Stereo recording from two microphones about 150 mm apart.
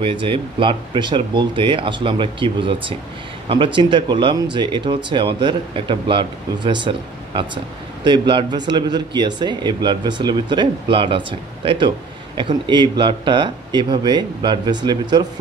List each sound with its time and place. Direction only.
0.0 s speech: 35° right (ahead or behind)